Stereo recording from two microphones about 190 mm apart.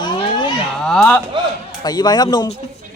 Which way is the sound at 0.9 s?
5° left (ahead or behind).